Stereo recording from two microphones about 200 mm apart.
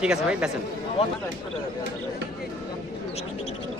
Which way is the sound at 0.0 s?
5° right (ahead or behind).